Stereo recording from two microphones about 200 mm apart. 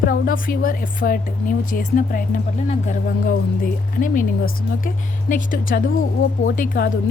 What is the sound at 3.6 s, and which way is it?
A woman's voice, 40° left (ahead or behind).